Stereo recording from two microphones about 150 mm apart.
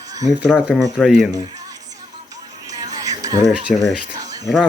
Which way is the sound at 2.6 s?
25° right (ahead or behind).